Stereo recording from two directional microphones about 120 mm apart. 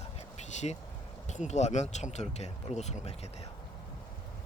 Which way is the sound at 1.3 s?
75° left (ahead or behind).